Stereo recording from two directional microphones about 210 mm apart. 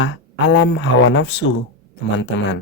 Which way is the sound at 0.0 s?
60° left (ahead or behind).